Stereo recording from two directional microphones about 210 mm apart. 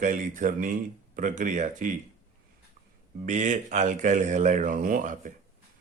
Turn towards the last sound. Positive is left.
turn(degrees=-40)  # may be behind; listen again after turning